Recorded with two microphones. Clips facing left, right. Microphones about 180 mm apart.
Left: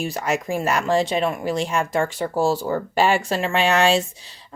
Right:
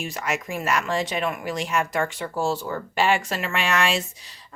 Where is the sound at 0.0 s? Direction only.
35° left (ahead or behind).